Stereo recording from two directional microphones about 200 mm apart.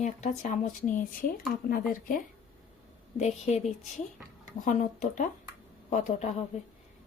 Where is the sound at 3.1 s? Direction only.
35° left (ahead or behind).